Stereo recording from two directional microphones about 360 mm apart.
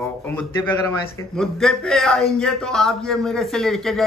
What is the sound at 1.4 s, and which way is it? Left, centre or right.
A man's voice, centre.